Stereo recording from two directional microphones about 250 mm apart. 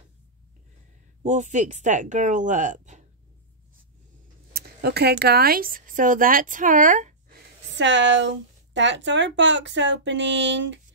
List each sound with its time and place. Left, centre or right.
1.2 s speech: right
4.6 s speech: right
7.7 s speech: right